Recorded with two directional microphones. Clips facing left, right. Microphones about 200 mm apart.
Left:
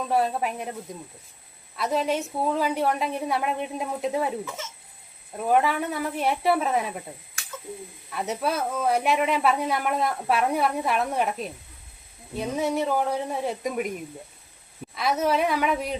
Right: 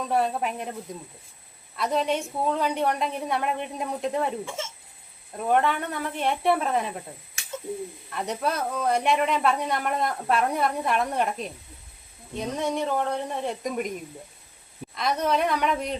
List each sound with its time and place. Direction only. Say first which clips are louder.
0.0 s speech: left 1 dB; centre (ahead or behind)
4.4 s speech: right 2 dB; 25° right (ahead or behind)
5.4 s speech: left 1 dB; 5° left (ahead or behind)
7.4 s a sound: left 1 dB; 25° right (ahead or behind)
8.1 s speech: left 1 dB; 5° left (ahead or behind)
14.9 s speech: left 1 dB; 5° left (ahead or behind)